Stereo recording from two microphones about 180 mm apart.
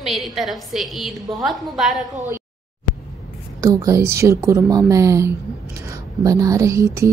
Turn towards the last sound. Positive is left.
turn(degrees=-15)  # may be behind; listen again after turning